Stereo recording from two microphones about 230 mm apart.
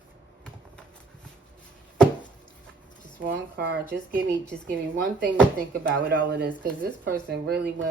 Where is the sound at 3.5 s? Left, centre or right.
Right.